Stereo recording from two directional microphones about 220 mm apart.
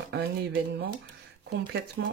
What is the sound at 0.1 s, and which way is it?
Speech, 45° right (ahead or behind).